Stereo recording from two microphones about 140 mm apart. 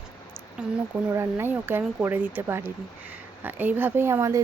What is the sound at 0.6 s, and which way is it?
Speech, 5° right (ahead or behind).